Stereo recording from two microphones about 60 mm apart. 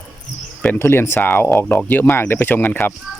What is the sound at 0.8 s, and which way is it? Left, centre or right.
Speech, left.